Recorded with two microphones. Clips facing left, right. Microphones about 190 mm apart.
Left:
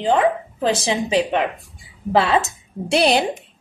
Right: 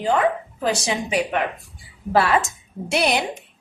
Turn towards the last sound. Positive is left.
turn(degrees=30)  # may be behind; listen again after turning